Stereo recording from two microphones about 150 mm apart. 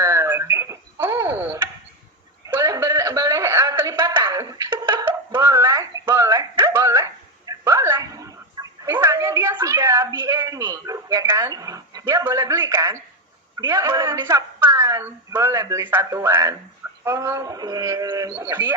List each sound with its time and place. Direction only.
0.0 s telephone: 15° right (ahead or behind)
2.5 s a sound: 20° right (ahead or behind)
13.6 s a woman's voice: 20° right (ahead or behind)